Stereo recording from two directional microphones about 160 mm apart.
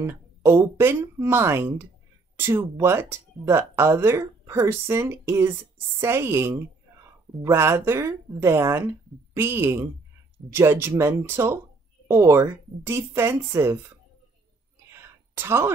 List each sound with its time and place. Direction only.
0.0 s speech: 15° right (ahead or behind)
14.9 s whispering: 15° right (ahead or behind)